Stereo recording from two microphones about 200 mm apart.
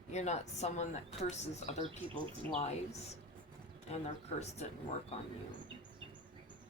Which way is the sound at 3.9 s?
35° left (ahead or behind).